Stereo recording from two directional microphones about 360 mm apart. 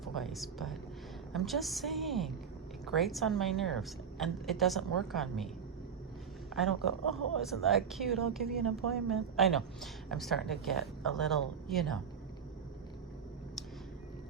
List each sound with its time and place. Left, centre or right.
0.0 s a woman's voice: centre
6.6 s a woman's voice: centre